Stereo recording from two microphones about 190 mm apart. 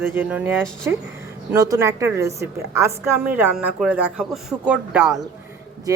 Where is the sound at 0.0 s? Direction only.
10° right (ahead or behind).